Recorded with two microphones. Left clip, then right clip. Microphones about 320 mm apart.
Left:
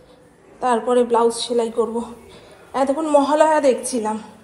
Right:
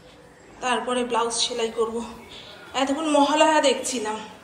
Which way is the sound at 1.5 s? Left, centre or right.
Centre.